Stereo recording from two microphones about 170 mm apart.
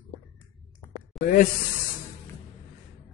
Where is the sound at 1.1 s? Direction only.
55° left (ahead or behind).